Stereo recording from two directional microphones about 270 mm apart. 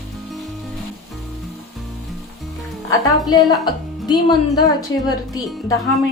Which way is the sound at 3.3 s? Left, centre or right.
Centre.